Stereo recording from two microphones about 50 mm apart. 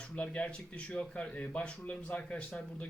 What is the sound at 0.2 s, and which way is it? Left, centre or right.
Speech, left.